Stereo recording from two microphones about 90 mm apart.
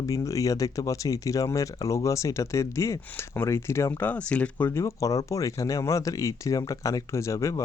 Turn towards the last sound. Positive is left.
turn(degrees=35)  # may be behind; listen again after turning